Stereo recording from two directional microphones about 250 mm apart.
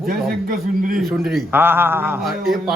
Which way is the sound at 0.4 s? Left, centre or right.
Right.